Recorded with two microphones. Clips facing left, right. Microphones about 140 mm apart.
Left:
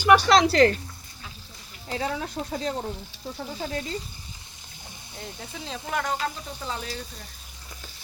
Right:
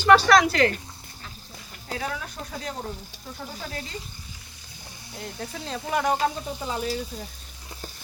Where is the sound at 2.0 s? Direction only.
25° left (ahead or behind).